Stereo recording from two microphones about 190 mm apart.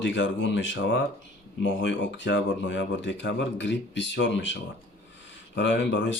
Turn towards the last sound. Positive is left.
turn(degrees=75)  # may be behind; listen again after turning